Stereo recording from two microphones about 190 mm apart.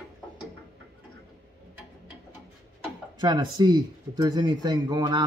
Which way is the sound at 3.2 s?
25° right (ahead or behind).